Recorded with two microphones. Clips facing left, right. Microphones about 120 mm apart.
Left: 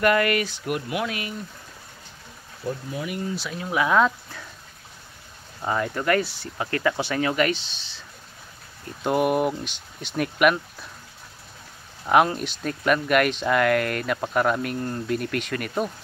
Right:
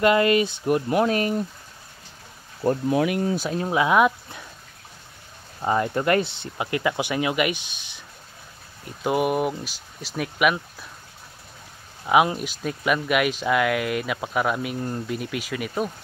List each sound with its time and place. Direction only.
0.0 s speech: 20° right (ahead or behind); by 1.3 s 40° right (ahead or behind)
2.6 s speech: 70° right (ahead or behind)
3.3 s speech: 40° right (ahead or behind)
3.7 s speech: 20° right (ahead or behind)
5.6 s speech: 25° right (ahead or behind)
9.0 s speech: 5° right (ahead or behind)
12.4 s speech: 5° right (ahead or behind)